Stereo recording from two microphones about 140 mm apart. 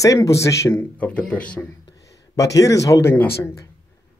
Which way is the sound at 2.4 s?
25° left (ahead or behind).